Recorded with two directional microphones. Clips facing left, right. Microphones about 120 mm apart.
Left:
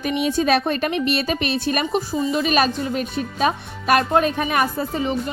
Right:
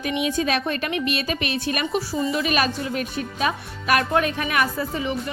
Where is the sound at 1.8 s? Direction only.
25° left (ahead or behind).